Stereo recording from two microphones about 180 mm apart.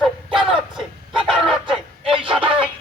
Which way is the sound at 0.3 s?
5° right (ahead or behind).